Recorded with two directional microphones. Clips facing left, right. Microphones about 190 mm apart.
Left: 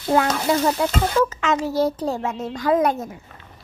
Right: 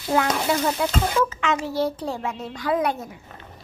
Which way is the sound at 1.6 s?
40° left (ahead or behind).